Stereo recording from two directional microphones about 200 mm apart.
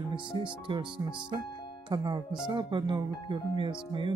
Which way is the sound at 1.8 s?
20° right (ahead or behind).